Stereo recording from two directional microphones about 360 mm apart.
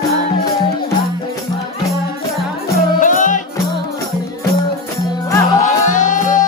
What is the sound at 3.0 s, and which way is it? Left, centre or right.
Music, left.